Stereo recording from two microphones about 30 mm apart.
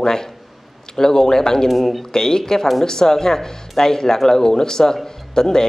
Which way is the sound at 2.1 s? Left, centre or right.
Centre.